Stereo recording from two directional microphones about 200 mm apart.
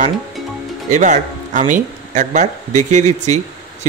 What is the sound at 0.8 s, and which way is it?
Speech, 40° right (ahead or behind).